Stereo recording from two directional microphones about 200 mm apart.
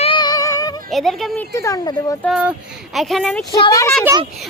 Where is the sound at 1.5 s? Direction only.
15° left (ahead or behind).